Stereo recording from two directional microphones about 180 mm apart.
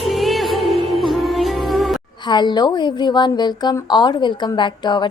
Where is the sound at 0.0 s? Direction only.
Centre (ahead or behind).